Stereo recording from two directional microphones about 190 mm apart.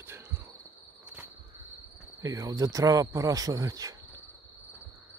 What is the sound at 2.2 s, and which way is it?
Speech, 20° right (ahead or behind).